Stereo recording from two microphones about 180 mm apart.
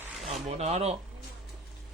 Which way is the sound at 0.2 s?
Centre (ahead or behind).